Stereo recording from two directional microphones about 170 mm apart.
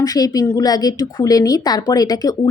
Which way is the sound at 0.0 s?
20° left (ahead or behind).